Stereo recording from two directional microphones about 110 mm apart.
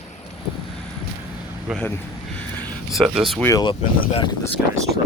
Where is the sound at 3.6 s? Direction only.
50° left (ahead or behind).